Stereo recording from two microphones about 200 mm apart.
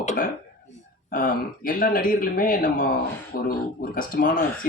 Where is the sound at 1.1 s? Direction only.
45° left (ahead or behind).